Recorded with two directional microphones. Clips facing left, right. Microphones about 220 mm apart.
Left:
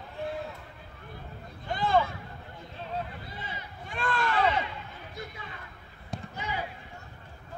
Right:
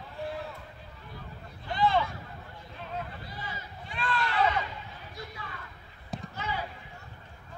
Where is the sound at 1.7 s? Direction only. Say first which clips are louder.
Left 1 dB; 50° left (ahead or behind).